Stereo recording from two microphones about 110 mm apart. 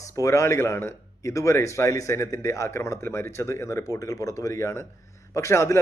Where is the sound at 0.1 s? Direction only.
25° left (ahead or behind).